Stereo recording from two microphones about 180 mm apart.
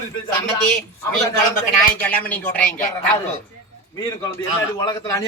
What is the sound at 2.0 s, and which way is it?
Speech, 10° left (ahead or behind).